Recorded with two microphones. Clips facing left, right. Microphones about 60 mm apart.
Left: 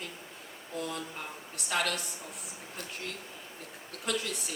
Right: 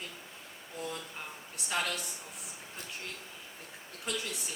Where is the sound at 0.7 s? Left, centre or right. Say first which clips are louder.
Left 3 dB; left.